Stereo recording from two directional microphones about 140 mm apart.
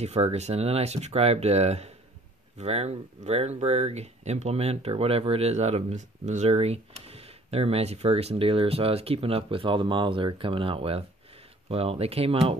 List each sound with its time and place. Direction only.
0.0 s speech: 50° right (ahead or behind)